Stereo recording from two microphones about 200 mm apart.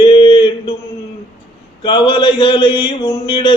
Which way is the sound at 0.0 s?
25° left (ahead or behind).